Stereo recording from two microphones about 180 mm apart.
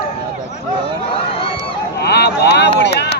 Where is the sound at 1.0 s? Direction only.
30° left (ahead or behind).